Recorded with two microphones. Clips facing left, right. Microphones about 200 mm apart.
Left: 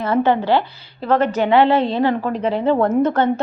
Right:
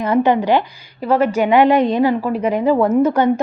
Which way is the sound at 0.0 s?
15° right (ahead or behind).